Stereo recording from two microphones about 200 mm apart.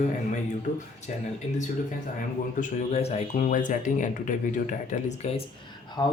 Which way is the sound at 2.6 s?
30° left (ahead or behind).